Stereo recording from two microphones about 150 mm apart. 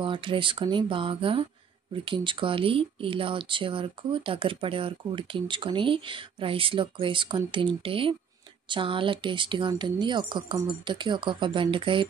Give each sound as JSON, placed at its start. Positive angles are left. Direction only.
{"t": 0.0, "sound": "speech", "side_deg": -35}